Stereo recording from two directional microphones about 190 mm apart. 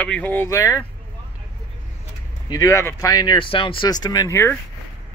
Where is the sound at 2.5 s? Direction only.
15° left (ahead or behind).